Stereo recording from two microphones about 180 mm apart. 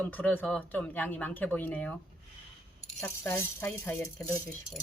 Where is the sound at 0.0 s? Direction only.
10° left (ahead or behind).